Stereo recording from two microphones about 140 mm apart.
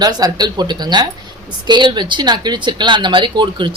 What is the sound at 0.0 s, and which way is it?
Speech, 30° right (ahead or behind).